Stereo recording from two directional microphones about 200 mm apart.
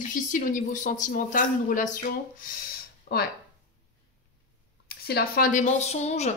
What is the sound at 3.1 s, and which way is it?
Speech, 55° left (ahead or behind).